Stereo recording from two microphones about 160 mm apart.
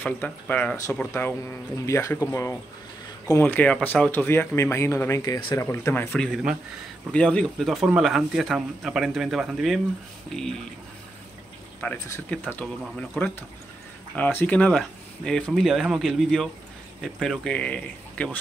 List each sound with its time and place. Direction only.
0.0 s speech: 10° left (ahead or behind)
11.8 s speech: 10° left (ahead or behind)